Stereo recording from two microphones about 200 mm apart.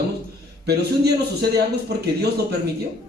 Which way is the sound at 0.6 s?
55° right (ahead or behind).